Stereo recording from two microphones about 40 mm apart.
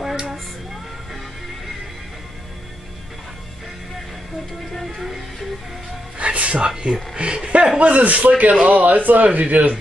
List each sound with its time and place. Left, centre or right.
0.0 s female singing: centre
4.9 s music: centre
6.1 s a sound: right
6.8 s speech: right
7.8 s speech: right